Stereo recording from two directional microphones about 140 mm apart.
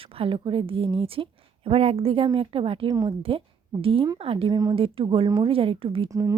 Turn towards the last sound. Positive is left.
turn(degrees=-25)  # may be behind; listen again after turning